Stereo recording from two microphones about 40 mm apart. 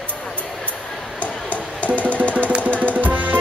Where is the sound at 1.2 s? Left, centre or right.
Left.